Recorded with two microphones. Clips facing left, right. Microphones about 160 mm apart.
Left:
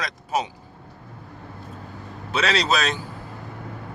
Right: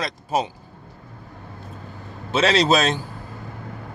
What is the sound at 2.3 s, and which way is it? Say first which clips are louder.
Speech: right 5 dB; 25° right (ahead or behind).